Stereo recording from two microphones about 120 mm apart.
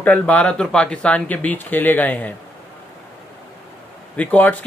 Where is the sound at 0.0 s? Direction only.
10° left (ahead or behind).